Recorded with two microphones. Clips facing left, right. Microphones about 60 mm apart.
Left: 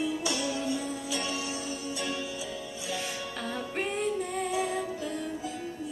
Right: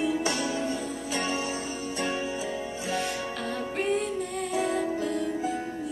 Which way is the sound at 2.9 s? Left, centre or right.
Centre.